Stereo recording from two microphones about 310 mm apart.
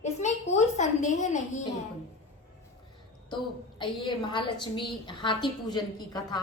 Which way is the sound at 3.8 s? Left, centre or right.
Centre.